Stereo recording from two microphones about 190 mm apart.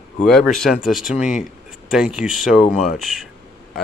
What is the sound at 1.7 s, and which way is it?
Speech, centre (ahead or behind).